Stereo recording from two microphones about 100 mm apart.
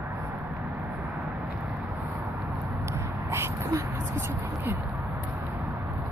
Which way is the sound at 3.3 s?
25° right (ahead or behind).